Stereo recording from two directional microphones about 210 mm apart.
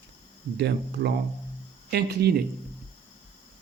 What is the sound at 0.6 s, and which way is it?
Speech, 50° right (ahead or behind).